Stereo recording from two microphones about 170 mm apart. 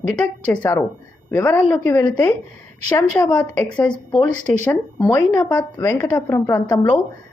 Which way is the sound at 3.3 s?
10° left (ahead or behind).